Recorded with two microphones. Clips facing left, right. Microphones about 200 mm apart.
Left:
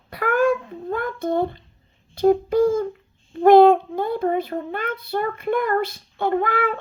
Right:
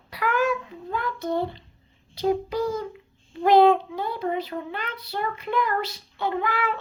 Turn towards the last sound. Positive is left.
turn(degrees=50)  # may be behind; listen again after turning